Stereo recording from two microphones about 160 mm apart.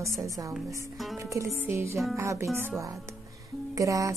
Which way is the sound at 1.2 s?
20° right (ahead or behind).